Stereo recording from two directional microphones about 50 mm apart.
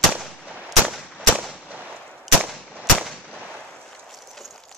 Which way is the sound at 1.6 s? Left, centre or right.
Right.